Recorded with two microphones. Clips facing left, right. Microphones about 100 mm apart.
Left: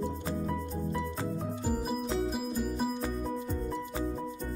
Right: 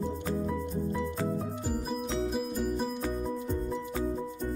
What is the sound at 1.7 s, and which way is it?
Music, 5° left (ahead or behind).